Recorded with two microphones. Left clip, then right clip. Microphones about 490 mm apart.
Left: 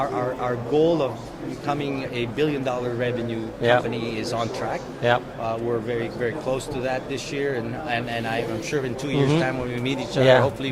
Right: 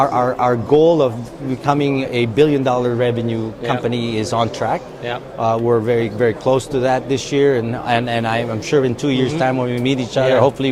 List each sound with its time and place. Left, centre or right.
0.0 s speech: right